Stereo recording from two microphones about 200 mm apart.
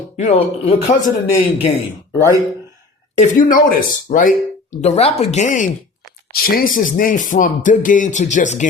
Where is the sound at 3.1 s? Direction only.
40° left (ahead or behind).